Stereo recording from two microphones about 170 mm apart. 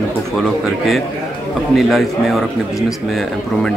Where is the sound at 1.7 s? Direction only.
Centre (ahead or behind).